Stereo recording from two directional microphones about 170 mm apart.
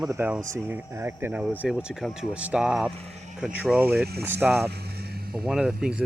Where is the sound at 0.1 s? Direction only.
10° right (ahead or behind).